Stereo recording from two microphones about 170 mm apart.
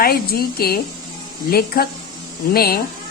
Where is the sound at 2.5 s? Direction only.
60° left (ahead or behind).